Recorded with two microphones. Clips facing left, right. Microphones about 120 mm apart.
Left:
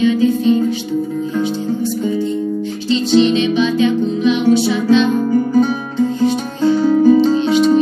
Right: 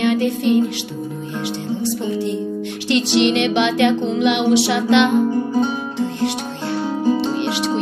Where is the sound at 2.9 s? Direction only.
70° right (ahead or behind).